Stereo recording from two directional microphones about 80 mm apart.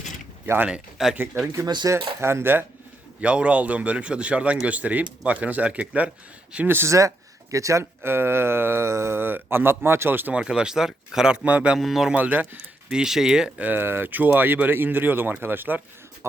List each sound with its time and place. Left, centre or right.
1.1 s speech: right
1.6 s speech: right
2.2 s speech: right
3.2 s speech: centre
6.7 s speech: right
7.5 s speech: right
10.3 s speech: centre
11.8 s speech: centre
12.1 s speech: right
12.9 s speech: centre
13.7 s speech: right